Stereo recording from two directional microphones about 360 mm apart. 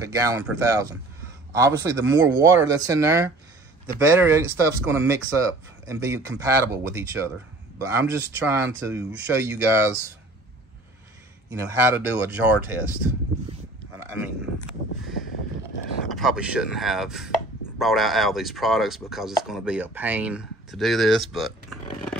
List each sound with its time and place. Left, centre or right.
0.0 s speech: centre
11.5 s speech: centre
16.1 s speech: centre